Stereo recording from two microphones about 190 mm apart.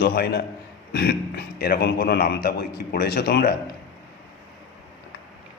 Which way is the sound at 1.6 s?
55° left (ahead or behind).